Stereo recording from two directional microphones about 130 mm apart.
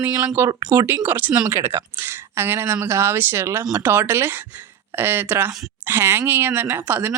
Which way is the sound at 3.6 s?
30° right (ahead or behind).